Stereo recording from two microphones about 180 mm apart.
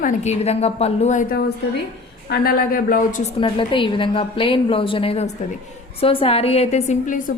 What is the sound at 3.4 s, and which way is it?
A woman's voice, 30° left (ahead or behind).